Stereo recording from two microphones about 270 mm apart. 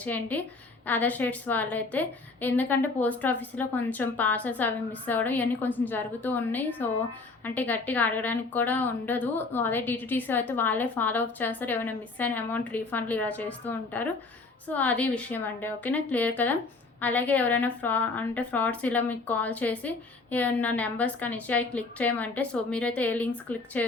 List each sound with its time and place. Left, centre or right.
0.0 s a woman's voice: centre